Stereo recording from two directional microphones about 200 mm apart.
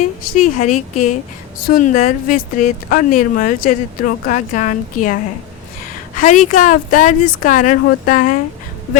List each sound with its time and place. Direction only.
0.4 s a woman's voice: 35° left (ahead or behind)
6.1 s a woman's voice: 40° left (ahead or behind)